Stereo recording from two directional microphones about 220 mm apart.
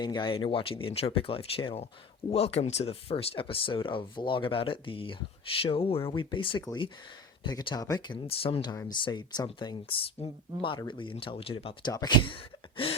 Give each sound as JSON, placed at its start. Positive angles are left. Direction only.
{"t": 0.0, "sound": "speech", "side_deg": 20}